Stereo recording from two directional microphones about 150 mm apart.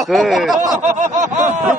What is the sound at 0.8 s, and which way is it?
Snicker, 55° right (ahead or behind).